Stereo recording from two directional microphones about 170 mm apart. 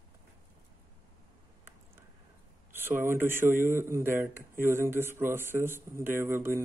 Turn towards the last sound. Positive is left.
turn(degrees=-15)  # may be behind; listen again after turning